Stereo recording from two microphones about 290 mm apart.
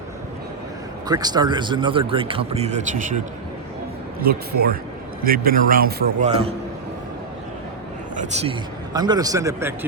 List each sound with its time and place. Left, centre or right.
1.0 s a man's voice: centre
5.2 s a man's voice: right
8.1 s a man's voice: right